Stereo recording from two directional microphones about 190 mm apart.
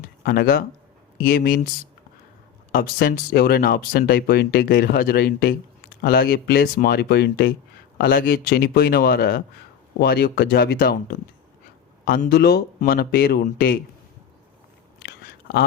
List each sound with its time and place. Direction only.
0.2 s speech: 50° left (ahead or behind)
2.7 s speech: 50° left (ahead or behind)